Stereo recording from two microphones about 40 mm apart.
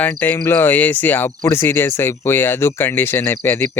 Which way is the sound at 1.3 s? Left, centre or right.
Left.